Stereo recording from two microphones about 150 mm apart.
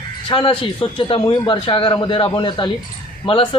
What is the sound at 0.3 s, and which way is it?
A man's voice, 35° left (ahead or behind).